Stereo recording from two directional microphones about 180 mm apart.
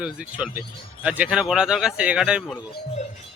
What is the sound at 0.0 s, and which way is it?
A man's voice, 5° right (ahead or behind).